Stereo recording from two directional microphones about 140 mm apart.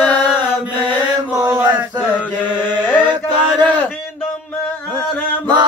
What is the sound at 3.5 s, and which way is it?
Male singing, 5° left (ahead or behind).